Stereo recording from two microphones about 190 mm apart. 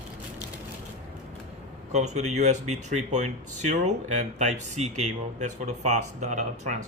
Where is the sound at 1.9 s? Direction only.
35° right (ahead or behind).